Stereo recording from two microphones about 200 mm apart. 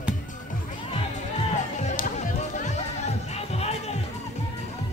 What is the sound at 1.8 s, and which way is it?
Music, 35° left (ahead or behind).